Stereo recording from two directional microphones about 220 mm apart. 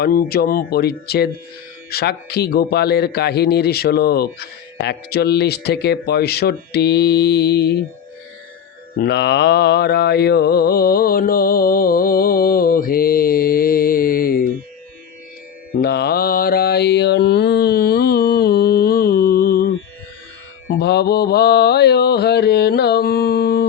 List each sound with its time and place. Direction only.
0.0 s a man's voice: 40° left (ahead or behind)
9.0 s mantra: 50° left (ahead or behind)
15.7 s mantra: 45° left (ahead or behind)